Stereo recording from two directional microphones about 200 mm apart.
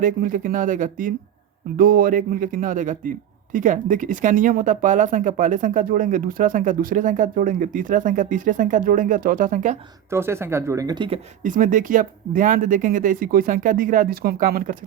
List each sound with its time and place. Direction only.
0.0 s a man's voice: 40° right (ahead or behind)
10.1 s speech: 10° right (ahead or behind)
11.4 s speech: 40° right (ahead or behind)